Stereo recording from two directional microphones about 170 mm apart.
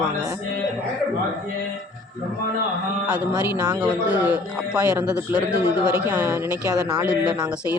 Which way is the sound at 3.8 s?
5° right (ahead or behind).